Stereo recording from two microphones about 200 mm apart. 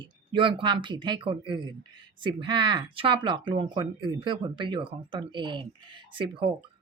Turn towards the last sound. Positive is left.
turn(degrees=-25)  # may be behind; listen again after turning